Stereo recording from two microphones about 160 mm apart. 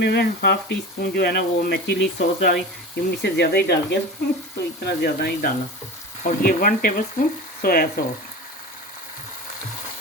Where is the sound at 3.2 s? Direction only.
90° left.